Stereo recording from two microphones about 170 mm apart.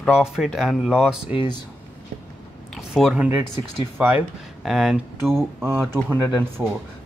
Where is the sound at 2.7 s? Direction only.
Centre (ahead or behind).